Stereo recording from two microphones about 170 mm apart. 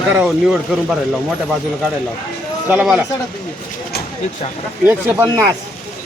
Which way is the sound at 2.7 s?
5° right (ahead or behind).